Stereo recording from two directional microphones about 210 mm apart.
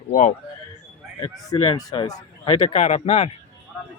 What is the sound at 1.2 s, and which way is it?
Speech, 25° left (ahead or behind).